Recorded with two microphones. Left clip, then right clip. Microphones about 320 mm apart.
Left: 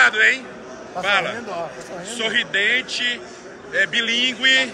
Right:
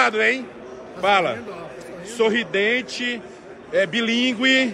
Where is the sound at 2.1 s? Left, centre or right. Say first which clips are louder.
Right 1 dB; centre.